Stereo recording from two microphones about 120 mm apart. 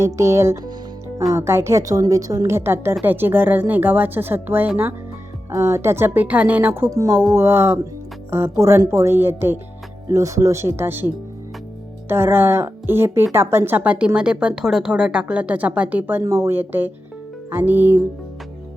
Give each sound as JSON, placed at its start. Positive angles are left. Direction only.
{"t": 0.0, "sound": "a woman's voice", "side_deg": -25}
{"t": 12.0, "sound": "a woman's voice", "side_deg": -20}